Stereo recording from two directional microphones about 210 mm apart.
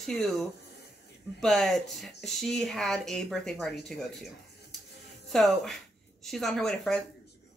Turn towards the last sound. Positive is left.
turn(degrees=0)  # may be behind; listen again after turning